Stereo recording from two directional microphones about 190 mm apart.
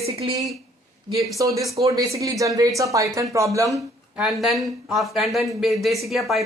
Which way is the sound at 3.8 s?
Centre (ahead or behind).